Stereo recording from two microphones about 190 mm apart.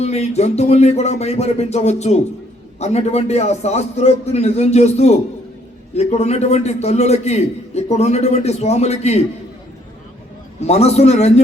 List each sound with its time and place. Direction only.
0.0 s a man's voice: 35° left (ahead or behind)
10.6 s a man's voice: 35° left (ahead or behind)